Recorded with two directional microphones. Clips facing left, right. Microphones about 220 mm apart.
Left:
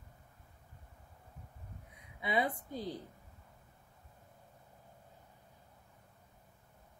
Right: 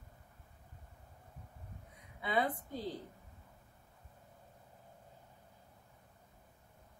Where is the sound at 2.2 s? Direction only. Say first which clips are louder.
Left 1 dB; 15° left (ahead or behind).